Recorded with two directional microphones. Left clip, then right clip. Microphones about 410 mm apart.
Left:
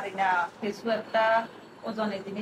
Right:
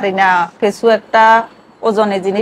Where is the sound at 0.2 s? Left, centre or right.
Right.